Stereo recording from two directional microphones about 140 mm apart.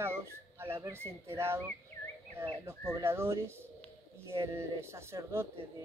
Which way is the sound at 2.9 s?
20° right (ahead or behind).